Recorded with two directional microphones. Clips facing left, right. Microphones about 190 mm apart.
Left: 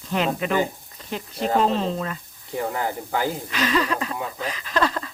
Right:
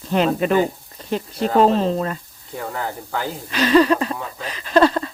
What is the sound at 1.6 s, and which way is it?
Speech, 40° right (ahead or behind).